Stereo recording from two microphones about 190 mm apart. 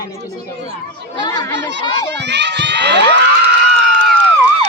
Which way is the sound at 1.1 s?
20° left (ahead or behind).